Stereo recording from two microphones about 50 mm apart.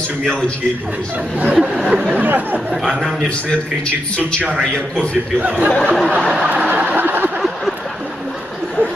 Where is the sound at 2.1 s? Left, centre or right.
Right.